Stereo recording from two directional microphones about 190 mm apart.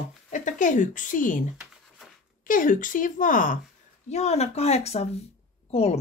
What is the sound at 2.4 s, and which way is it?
Speech, 45° left (ahead or behind).